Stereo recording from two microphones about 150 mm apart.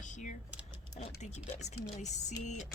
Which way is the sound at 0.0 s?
55° left (ahead or behind).